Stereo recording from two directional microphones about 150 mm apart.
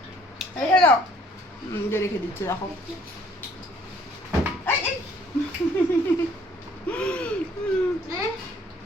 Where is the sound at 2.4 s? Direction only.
20° left (ahead or behind).